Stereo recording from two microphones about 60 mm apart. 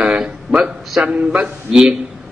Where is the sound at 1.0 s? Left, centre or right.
Right.